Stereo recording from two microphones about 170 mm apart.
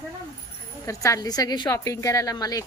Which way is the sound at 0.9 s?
20° left (ahead or behind).